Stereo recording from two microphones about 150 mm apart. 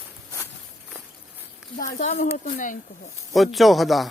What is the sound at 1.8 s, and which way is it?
Speech, 60° left (ahead or behind).